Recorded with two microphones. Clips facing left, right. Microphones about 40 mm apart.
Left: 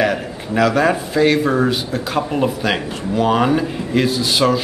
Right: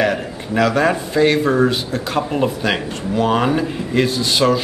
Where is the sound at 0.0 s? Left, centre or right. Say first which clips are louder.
Even; centre.